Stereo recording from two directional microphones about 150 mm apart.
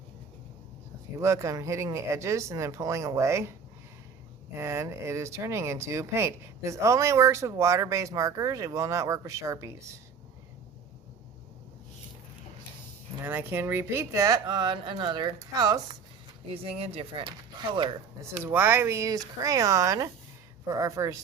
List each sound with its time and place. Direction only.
1.2 s speech: 20° right (ahead or behind)
4.5 s speech: 20° right (ahead or behind)
13.2 s speech: 15° right (ahead or behind)
16.5 s speech: 40° right (ahead or behind)
18.4 s speech: 15° right (ahead or behind)